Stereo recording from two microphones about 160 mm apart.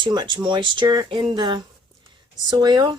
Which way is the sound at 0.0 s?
30° right (ahead or behind).